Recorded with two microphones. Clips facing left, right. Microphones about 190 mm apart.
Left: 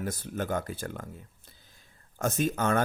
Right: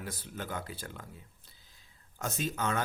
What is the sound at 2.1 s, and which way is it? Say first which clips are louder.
Speech: left 7 dB; 50° left (ahead or behind).